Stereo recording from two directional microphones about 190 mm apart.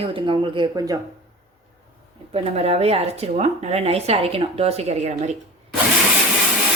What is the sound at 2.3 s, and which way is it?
Speech, 35° right (ahead or behind).